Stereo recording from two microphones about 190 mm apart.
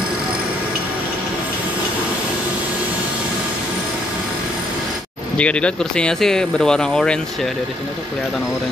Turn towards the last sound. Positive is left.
turn(degrees=5)  # may be behind; listen again after turning